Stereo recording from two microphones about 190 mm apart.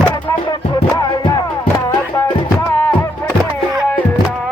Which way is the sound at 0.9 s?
20° left (ahead or behind).